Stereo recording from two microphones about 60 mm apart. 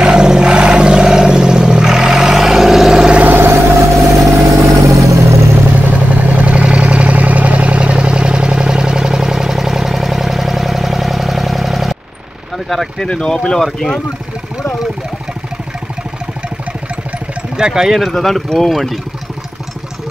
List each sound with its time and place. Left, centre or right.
0.0 s vehicle: centre
3.2 s vehicle: right
3.8 s vehicle: right
5.9 s vehicle: right; by 12.0 s centre
12.6 s speech: centre
13.1 s speech: centre
17.6 s speech: centre
18.0 s speech: centre